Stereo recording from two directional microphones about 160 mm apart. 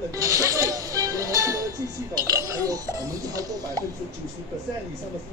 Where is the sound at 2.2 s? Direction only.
20° right (ahead or behind).